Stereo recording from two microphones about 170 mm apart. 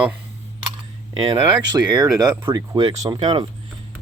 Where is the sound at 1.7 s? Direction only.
25° right (ahead or behind).